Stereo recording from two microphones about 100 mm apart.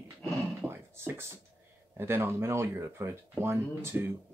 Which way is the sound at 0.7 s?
25° right (ahead or behind).